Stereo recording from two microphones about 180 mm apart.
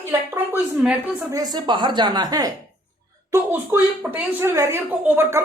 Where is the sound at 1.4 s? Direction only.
25° right (ahead or behind).